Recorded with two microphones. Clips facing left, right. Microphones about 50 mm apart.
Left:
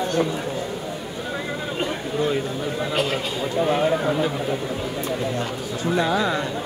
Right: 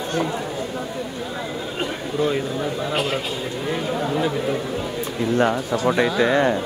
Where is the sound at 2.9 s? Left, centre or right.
Centre.